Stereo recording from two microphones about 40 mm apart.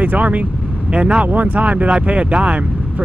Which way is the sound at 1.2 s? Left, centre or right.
Right.